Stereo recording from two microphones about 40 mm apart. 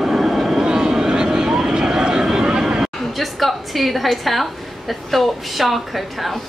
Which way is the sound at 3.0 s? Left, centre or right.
Centre.